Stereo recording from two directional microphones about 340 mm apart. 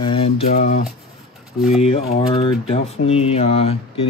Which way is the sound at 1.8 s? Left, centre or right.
Centre.